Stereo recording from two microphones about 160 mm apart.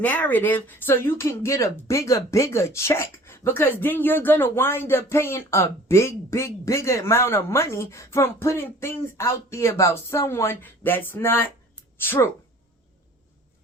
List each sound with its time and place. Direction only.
0.0 s speech: 10° left (ahead or behind)